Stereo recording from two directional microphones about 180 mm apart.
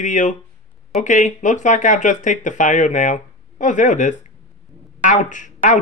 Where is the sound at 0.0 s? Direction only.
40° left (ahead or behind).